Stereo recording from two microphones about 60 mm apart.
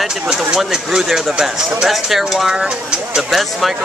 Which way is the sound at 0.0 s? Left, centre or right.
Centre.